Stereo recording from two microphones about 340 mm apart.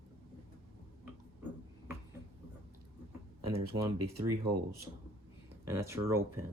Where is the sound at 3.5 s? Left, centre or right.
Right.